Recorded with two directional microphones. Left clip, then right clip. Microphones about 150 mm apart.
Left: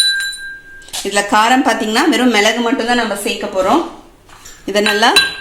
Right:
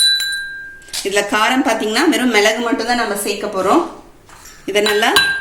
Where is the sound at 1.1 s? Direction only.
40° left (ahead or behind).